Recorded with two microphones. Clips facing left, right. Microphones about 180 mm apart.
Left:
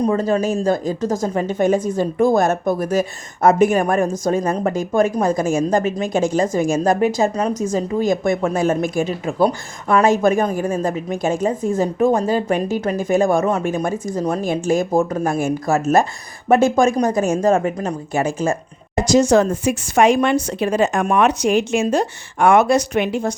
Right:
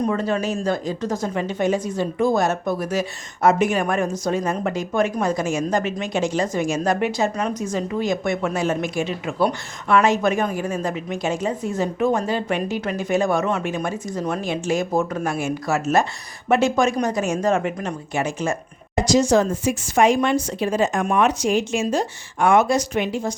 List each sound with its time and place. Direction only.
0.0 s a woman's voice: 40° left (ahead or behind)
19.1 s a woman's voice: 70° left (ahead or behind)